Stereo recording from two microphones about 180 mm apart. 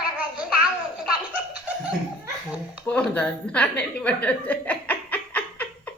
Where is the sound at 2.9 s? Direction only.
5° left (ahead or behind).